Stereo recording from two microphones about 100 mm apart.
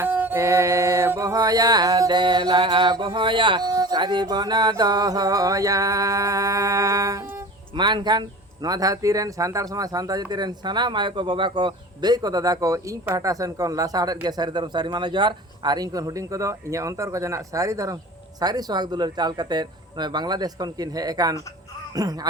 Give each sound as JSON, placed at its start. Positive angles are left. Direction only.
{"t": 0.0, "sound": "music", "side_deg": -20}
{"t": 3.7, "sound": "speech", "side_deg": -40}
{"t": 7.8, "sound": "speech", "side_deg": -50}